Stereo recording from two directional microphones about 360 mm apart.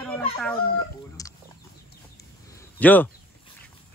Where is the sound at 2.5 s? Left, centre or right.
Centre.